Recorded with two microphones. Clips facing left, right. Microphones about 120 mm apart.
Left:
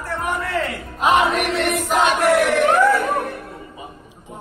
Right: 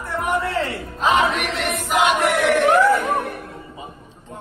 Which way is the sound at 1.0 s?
Centre (ahead or behind).